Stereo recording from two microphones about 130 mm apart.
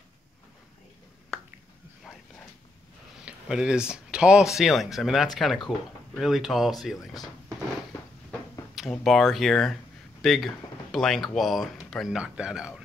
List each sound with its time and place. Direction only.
1.3 s finger snapping: 5° right (ahead or behind)
3.3 s speech: 5° right (ahead or behind)
8.3 s a sound: 5° left (ahead or behind)
10.2 s speech: centre (ahead or behind)